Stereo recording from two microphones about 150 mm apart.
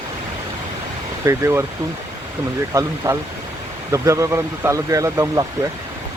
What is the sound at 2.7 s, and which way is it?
Speech, 20° right (ahead or behind).